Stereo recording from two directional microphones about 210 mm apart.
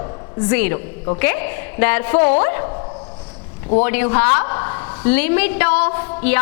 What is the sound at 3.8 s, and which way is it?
A woman's voice, 10° left (ahead or behind).